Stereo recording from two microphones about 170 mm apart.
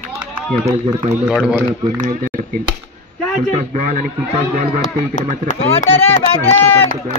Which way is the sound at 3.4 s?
45° right (ahead or behind).